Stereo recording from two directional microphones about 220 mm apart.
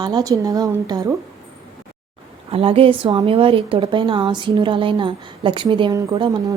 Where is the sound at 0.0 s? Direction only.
20° right (ahead or behind).